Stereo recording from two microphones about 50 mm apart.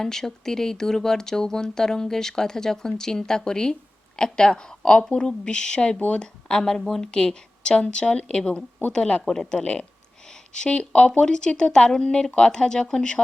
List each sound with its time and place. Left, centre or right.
0.0 s speech: centre